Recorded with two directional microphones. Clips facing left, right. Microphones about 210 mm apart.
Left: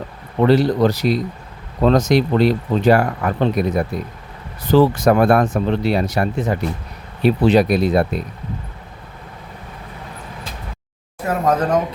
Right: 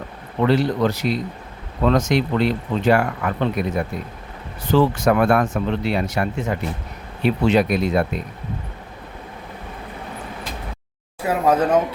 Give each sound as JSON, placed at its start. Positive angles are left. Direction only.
{"t": 0.4, "sound": "speech", "side_deg": 35}
{"t": 11.3, "sound": "speech", "side_deg": -10}